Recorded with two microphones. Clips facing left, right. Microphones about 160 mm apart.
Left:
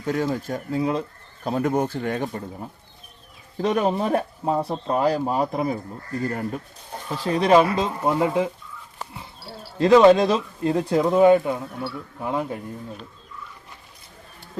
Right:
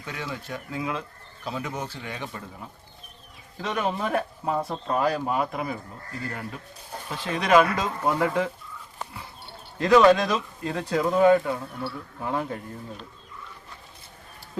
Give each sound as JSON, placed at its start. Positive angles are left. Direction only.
{"t": 0.0, "sound": "speech", "side_deg": 45}
{"t": 1.5, "sound": "speech", "side_deg": 50}
{"t": 7.1, "sound": "speech", "side_deg": 35}
{"t": 9.6, "sound": "speech", "side_deg": 25}